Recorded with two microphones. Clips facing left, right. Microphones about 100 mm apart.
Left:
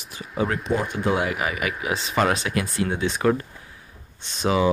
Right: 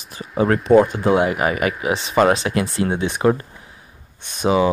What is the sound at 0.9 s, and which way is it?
Speech, 30° right (ahead or behind).